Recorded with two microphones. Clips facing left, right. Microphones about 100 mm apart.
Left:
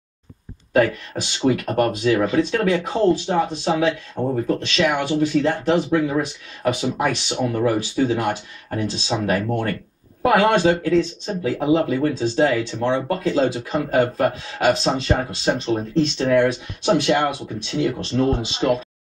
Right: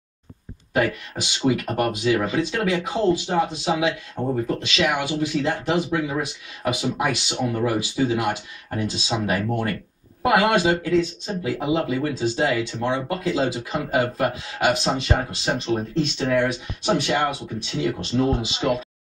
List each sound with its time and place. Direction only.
0.7 s speech: 5° right (ahead or behind)
18.1 s speech: 10° right (ahead or behind)
18.4 s speech: 35° left (ahead or behind)